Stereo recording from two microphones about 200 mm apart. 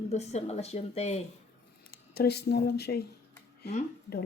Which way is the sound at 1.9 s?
50° left (ahead or behind).